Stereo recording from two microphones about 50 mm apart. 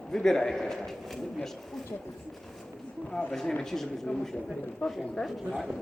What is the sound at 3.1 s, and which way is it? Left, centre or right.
Speech, centre.